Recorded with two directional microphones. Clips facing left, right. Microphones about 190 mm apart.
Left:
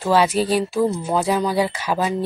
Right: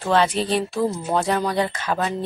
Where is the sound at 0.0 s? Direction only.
5° left (ahead or behind).